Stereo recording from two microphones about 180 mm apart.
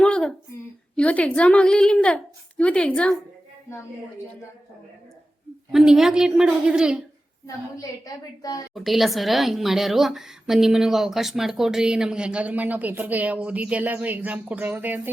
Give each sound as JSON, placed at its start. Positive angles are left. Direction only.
{"t": 0.0, "sound": "a sound", "side_deg": 5}
{"t": 0.9, "sound": "a woman's voice", "side_deg": 5}
{"t": 5.7, "sound": "a woman's voice", "side_deg": -5}
{"t": 7.4, "sound": "a woman's voice", "side_deg": 20}
{"t": 8.7, "sound": "a woman's voice", "side_deg": 0}